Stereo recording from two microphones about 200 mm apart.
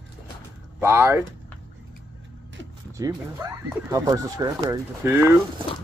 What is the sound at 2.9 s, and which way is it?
Speech, 15° right (ahead or behind).